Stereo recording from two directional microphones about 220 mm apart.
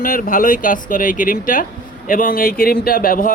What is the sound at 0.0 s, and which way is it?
Speech, 40° left (ahead or behind).